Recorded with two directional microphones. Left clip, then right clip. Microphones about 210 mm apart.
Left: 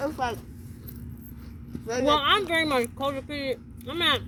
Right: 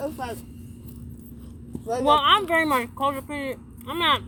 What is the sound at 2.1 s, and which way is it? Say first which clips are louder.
Speech: right 4 dB; 60° left (ahead or behind).